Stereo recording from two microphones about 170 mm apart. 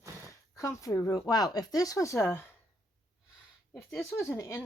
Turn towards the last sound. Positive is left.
turn(degrees=15)  # may be behind; listen again after turning